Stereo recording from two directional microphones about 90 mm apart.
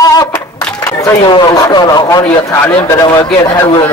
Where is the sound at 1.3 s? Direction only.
50° left (ahead or behind).